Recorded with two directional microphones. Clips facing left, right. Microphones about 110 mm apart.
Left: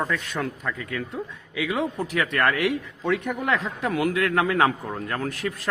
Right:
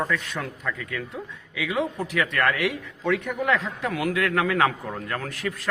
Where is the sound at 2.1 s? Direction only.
35° left (ahead or behind).